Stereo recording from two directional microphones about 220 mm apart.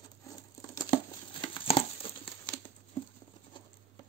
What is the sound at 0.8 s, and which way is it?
Crumpling, 20° left (ahead or behind).